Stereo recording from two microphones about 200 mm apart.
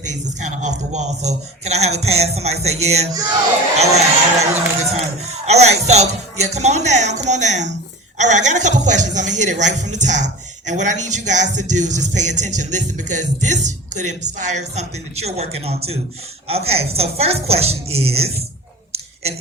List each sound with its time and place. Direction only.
0.1 s speech: 35° right (ahead or behind)